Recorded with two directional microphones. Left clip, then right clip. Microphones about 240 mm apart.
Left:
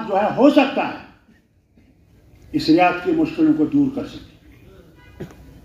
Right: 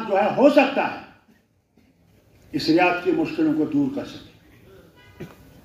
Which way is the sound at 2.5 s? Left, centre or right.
Right.